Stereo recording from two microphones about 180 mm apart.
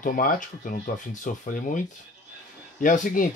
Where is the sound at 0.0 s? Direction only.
50° left (ahead or behind).